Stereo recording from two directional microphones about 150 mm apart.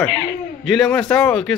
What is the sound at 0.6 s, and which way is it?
Speech, centre (ahead or behind).